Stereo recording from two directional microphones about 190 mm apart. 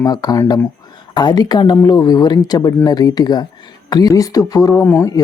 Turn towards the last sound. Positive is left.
turn(degrees=15)  # may be behind; listen again after turning